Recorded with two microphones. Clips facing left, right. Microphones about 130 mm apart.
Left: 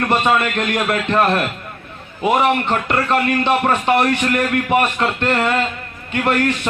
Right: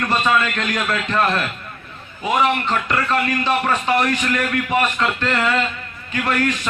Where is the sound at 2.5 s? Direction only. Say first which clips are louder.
Left 3 dB; 30° left (ahead or behind).